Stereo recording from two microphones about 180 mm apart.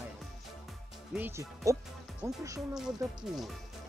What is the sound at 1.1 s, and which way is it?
Speech, 15° right (ahead or behind).